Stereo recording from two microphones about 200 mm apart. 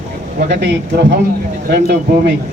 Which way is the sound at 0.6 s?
60° right (ahead or behind).